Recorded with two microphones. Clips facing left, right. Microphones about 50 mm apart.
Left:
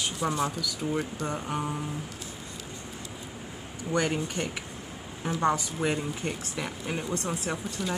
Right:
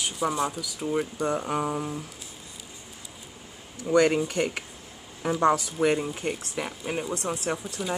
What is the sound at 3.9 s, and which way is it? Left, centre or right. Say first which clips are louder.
Speech: right 7 dB; right.